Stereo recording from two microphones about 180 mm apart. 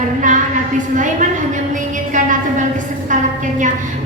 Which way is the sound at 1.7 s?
45° right (ahead or behind).